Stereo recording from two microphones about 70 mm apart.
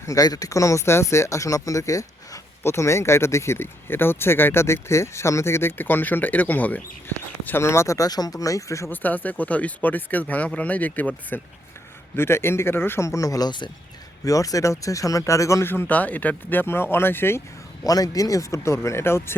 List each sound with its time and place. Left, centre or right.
0.0 s speech: left
7.4 s speech: left
8.9 s speech: left
12.1 s speech: left
13.1 s speech: left
14.3 s speech: left
15.6 s speech: left
15.9 s speech: left
17.8 s speech: left